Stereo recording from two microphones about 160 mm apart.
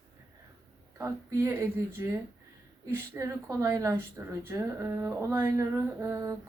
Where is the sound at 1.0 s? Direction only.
15° right (ahead or behind).